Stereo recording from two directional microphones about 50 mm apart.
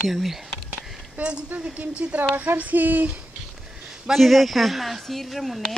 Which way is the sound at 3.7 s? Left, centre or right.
Centre.